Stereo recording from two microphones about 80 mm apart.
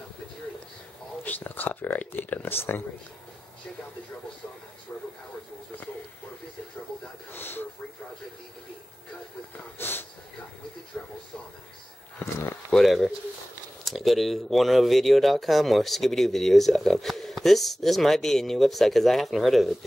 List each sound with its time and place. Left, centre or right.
1.2 s speech: left
7.3 s speech: left
9.8 s a sound: left
10.9 s speech: centre
12.7 s speech: centre